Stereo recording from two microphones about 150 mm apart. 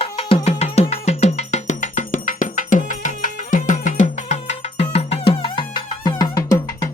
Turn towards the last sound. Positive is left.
turn(degrees=25)  # may be behind; listen again after turning